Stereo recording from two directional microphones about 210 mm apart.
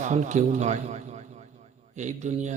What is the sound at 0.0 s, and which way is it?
A man's voice, 35° right (ahead or behind).